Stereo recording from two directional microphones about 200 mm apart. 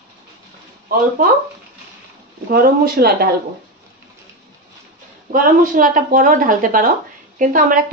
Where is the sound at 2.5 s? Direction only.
50° right (ahead or behind).